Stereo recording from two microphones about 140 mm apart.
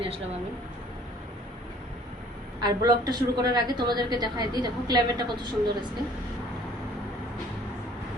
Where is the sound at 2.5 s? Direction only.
30° right (ahead or behind).